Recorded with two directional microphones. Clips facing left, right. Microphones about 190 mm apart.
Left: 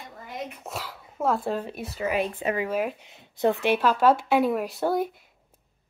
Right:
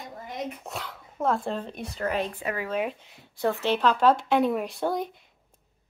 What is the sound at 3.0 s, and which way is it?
Speech, 20° left (ahead or behind).